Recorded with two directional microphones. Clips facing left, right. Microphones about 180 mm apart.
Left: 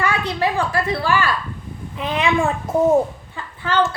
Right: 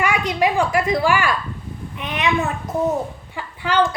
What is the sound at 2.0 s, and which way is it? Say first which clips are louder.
Speech: left 2 dB; 30° left (ahead or behind).